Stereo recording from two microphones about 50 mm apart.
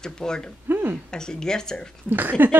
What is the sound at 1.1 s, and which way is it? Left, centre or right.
Speech, centre.